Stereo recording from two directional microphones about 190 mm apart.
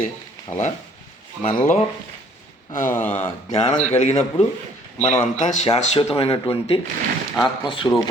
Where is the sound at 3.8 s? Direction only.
35° left (ahead or behind).